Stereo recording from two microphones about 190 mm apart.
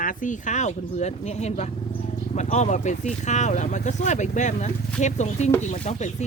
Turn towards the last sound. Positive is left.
turn(degrees=35)  # may be behind; listen again after turning